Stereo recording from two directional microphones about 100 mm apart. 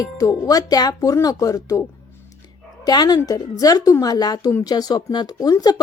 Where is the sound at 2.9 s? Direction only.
45° left (ahead or behind).